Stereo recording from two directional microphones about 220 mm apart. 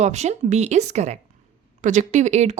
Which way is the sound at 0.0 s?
30° right (ahead or behind).